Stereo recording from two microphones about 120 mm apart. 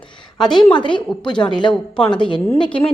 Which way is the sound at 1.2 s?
40° left (ahead or behind).